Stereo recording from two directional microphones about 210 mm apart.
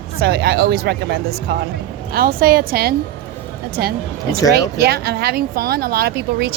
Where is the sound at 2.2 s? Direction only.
45° right (ahead or behind).